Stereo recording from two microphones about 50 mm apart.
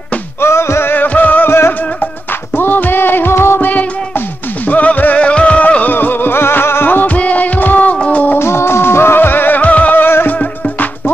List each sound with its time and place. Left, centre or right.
0.4 s music: left
0.9 s music: left
2.5 s music: left
4.6 s music: left
5.9 s music: left
8.4 s music: left